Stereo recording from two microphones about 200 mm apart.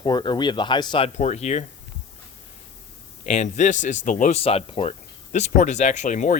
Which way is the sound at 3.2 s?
35° left (ahead or behind).